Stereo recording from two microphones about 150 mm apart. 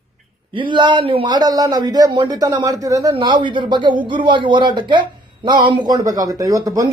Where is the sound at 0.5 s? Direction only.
30° right (ahead or behind).